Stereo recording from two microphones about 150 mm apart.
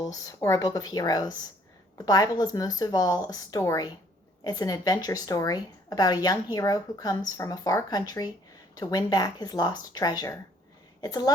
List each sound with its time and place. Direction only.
0.0 s a woman's voice: 25° left (ahead or behind)